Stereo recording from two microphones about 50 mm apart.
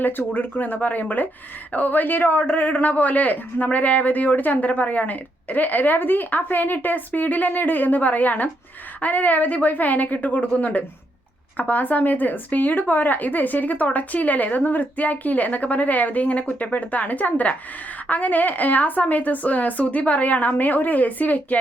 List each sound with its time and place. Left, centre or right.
0.0 s speech: left